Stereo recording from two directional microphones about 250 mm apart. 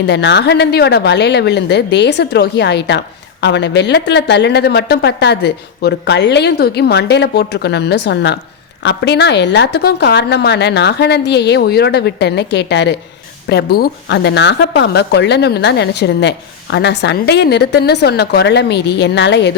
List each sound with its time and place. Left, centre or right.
0.0 s speech: left